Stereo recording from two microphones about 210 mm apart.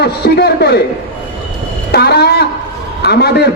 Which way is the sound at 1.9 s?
50° left (ahead or behind).